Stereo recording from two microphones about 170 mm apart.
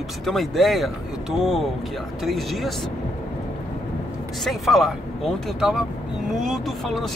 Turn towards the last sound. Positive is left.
turn(degrees=0)  # may be behind; listen again after turning